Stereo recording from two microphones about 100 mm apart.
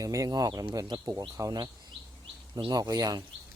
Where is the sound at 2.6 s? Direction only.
45° right (ahead or behind).